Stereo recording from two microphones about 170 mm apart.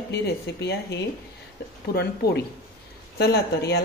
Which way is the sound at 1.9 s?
70° left (ahead or behind).